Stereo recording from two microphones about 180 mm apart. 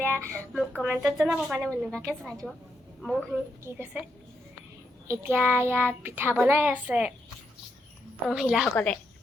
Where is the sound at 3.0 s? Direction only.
5° left (ahead or behind).